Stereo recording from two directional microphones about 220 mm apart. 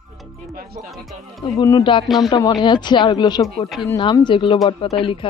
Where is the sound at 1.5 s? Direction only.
20° left (ahead or behind).